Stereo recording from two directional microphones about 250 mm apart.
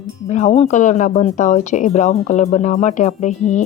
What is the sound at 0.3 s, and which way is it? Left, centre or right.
Speech, left.